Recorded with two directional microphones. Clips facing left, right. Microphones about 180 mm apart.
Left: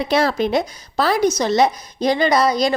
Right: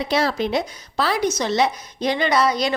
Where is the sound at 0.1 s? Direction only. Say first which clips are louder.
Left 3 dB; 50° left (ahead or behind).